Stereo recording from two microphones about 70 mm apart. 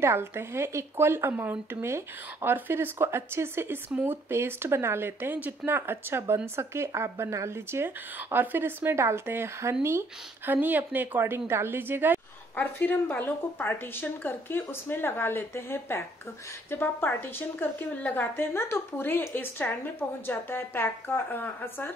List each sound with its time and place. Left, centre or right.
0.0 s speech: right
12.5 s a woman's voice: left